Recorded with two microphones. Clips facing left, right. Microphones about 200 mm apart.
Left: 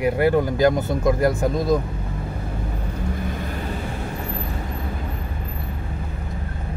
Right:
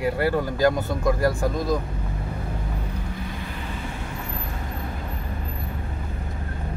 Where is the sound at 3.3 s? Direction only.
45° left (ahead or behind).